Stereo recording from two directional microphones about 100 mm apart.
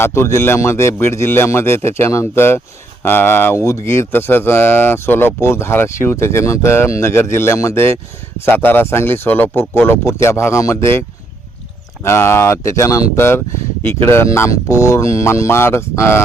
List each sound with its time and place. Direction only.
0.0 s speech: 25° left (ahead or behind)
12.0 s speech: 25° left (ahead or behind)